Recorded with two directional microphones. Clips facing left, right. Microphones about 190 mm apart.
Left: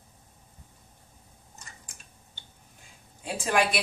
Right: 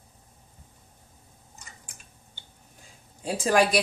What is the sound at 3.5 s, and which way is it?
Speech, 40° right (ahead or behind).